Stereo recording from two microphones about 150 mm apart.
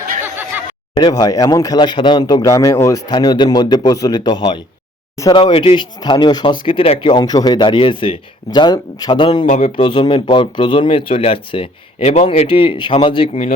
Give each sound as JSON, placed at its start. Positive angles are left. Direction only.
{"t": 0.9, "sound": "speech", "side_deg": 30}
{"t": 9.5, "sound": "speech", "side_deg": 45}